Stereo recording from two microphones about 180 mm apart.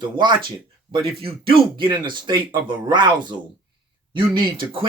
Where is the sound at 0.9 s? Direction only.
20° right (ahead or behind).